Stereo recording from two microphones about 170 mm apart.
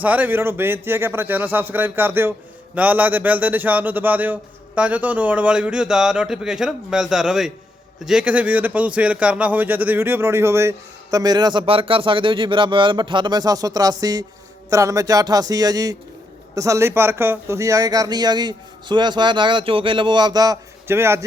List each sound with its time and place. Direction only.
0.0 s a man's voice: 10° right (ahead or behind)